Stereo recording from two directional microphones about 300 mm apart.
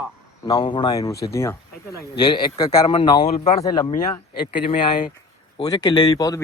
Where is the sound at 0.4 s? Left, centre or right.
Centre.